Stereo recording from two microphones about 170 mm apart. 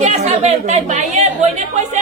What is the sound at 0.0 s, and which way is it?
A woman's voice, 45° right (ahead or behind).